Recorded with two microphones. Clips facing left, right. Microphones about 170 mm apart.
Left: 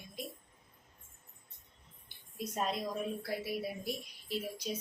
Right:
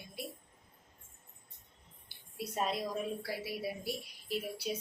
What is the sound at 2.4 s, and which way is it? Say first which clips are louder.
A woman's voice: right 1 dB; 5° right (ahead or behind).